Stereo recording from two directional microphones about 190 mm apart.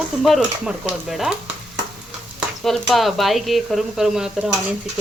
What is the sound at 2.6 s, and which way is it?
Speech, centre (ahead or behind).